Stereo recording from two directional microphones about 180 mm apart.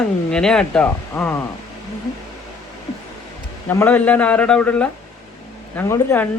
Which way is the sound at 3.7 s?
10° left (ahead or behind).